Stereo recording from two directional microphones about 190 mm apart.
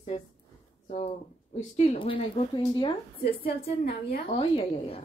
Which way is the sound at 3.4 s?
50° left (ahead or behind).